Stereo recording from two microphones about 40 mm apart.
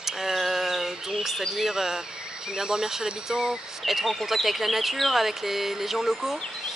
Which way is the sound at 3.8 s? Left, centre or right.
Centre.